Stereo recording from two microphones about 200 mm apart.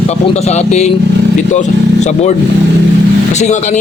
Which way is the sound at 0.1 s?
35° left (ahead or behind).